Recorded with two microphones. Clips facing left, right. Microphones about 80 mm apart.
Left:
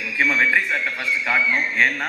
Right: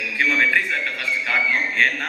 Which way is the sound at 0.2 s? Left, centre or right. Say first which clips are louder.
Left 1 dB; centre.